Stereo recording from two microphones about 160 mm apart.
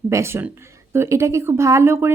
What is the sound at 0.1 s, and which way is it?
A woman's voice, 15° right (ahead or behind).